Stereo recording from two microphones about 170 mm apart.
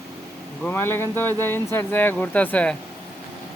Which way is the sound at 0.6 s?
10° left (ahead or behind).